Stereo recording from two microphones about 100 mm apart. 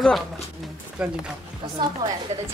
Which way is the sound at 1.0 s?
10° right (ahead or behind).